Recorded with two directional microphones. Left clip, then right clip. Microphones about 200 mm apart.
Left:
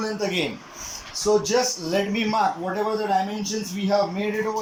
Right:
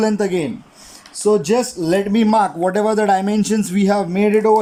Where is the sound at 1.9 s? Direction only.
40° right (ahead or behind).